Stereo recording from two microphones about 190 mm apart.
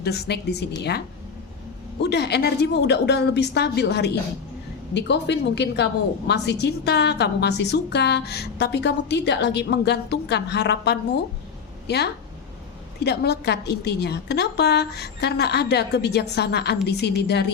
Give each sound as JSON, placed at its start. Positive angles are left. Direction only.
{"t": 0.0, "sound": "a woman's voice", "side_deg": 60}
{"t": 13.1, "sound": "a woman's voice", "side_deg": 60}